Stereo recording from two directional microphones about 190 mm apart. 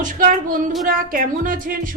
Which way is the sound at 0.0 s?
45° right (ahead or behind).